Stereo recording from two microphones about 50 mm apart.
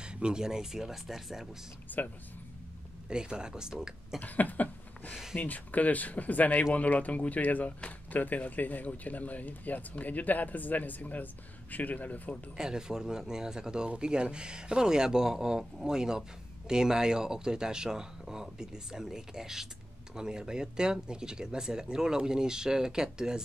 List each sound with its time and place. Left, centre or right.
0.0 s speech: centre
1.9 s speech: left
3.1 s speech: centre
4.2 s a sound: left
5.3 s speech: left
12.5 s speech: centre